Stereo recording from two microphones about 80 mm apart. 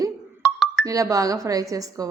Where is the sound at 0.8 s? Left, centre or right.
Right.